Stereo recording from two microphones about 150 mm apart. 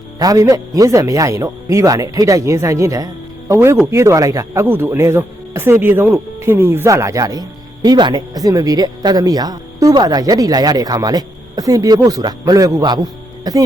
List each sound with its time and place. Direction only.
0.2 s speech: 20° right (ahead or behind)